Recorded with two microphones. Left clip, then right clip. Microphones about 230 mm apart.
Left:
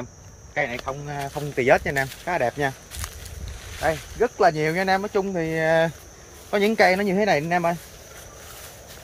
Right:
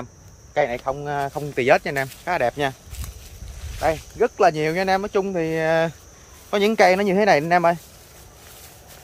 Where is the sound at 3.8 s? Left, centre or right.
Centre.